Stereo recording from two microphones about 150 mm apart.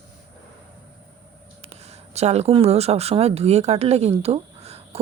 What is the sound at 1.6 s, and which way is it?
Speech, 45° right (ahead or behind).